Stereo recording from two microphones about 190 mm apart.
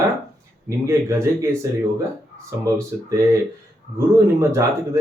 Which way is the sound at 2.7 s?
15° right (ahead or behind).